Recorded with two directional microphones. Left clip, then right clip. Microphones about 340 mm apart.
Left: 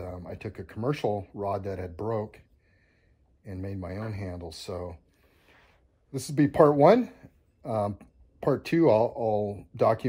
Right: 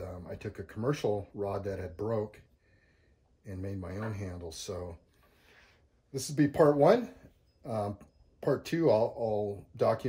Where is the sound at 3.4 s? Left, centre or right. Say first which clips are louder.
Left 3 dB; centre.